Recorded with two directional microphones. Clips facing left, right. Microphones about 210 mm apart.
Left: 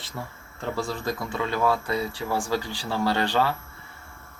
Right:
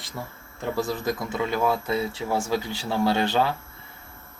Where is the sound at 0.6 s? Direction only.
15° right (ahead or behind).